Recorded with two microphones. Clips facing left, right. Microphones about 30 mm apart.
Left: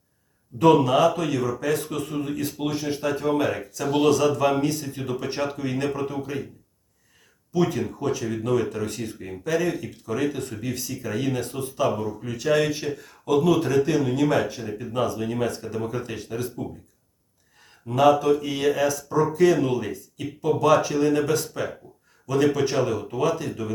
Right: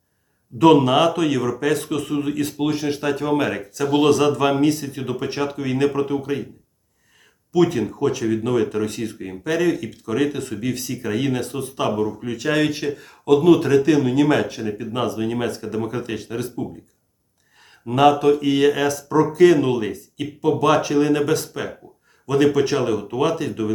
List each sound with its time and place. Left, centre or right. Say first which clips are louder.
0.6 s speech: right 3 dB; right
1.1 s speech: right 4 dB; right
1.7 s speech: right 4 dB; right
2.0 s speech: right 5 dB; right
4.0 s speech: right 2 dB; right
7.5 s speech: right 5 dB; right
10.8 s speech: right 5 dB; right
11.9 s speech: right 6 dB; right
14.9 s speech: right 1 dB; right
17.8 s speech: right 3 dB; right
18.1 s speech: right 4 dB; right